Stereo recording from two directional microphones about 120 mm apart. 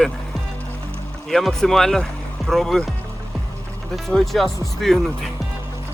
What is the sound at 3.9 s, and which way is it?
Speech, centre (ahead or behind).